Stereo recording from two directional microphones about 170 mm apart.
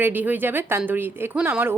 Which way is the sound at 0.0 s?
10° right (ahead or behind).